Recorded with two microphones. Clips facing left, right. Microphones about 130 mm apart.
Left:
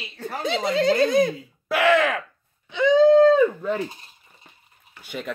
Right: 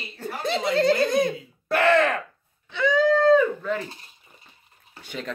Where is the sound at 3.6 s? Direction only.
20° left (ahead or behind).